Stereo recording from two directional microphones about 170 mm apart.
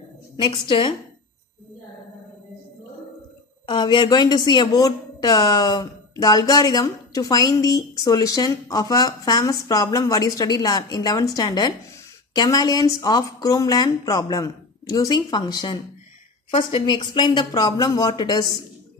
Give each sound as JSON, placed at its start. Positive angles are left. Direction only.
{"t": 0.4, "sound": "a woman's voice", "side_deg": 30}
{"t": 3.6, "sound": "a woman's voice", "side_deg": 25}